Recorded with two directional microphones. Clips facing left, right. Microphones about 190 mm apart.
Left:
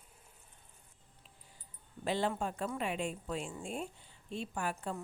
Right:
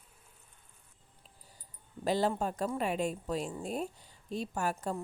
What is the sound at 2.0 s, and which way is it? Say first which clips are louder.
Speech: right 4 dB; 40° right (ahead or behind).